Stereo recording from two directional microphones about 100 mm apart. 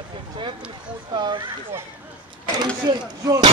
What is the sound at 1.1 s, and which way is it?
Speech, 50° right (ahead or behind).